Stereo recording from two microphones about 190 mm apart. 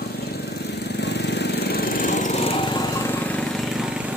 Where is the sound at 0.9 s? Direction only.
65° left (ahead or behind); by 2.9 s 25° left (ahead or behind).